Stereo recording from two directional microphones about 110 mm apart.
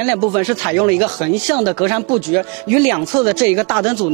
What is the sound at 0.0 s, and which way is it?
Speech, 15° right (ahead or behind).